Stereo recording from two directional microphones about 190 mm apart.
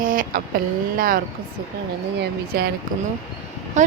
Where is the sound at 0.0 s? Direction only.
45° right (ahead or behind).